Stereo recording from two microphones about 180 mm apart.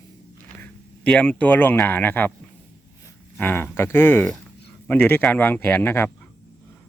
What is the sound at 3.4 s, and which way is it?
A man's voice, 10° left (ahead or behind).